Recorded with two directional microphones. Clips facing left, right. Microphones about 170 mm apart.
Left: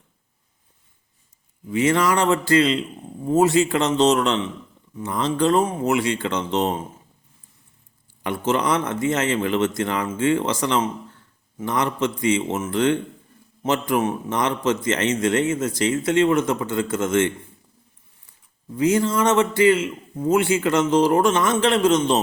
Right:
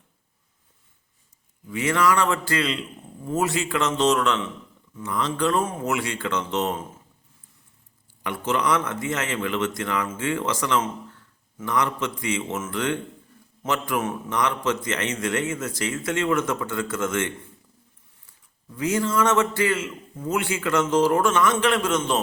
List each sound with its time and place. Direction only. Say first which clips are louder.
1.7 s a man's voice: left 3 dB; 25° left (ahead or behind)
8.2 s a man's voice: left 3 dB; 30° left (ahead or behind)
18.7 s a man's voice: left 4 dB; 20° left (ahead or behind)
19.8 s a man's voice: left 7 dB; 30° left (ahead or behind)